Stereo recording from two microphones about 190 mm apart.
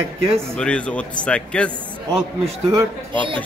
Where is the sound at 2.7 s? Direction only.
25° right (ahead or behind).